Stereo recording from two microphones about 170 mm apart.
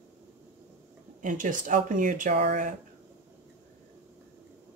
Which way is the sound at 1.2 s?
50° right (ahead or behind).